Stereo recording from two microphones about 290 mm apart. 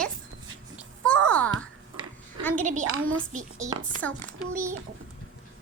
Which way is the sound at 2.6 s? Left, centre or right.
Right.